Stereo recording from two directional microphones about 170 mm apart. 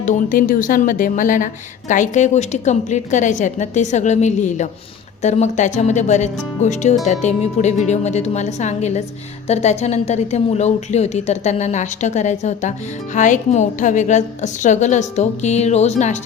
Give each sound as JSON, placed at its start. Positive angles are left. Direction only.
{"t": 0.0, "sound": "a woman's voice", "side_deg": 50}